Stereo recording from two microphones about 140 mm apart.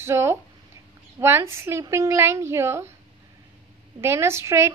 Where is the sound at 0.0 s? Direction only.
20° right (ahead or behind).